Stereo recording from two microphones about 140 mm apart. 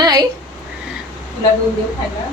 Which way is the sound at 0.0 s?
25° right (ahead or behind).